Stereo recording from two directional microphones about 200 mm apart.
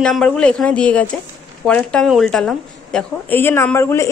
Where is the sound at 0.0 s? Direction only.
Centre (ahead or behind).